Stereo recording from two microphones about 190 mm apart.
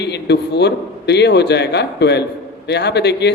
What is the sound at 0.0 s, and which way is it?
A man's voice, 60° left (ahead or behind).